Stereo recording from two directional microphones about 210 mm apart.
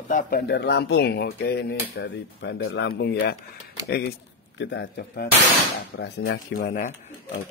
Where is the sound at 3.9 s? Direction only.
50° left (ahead or behind).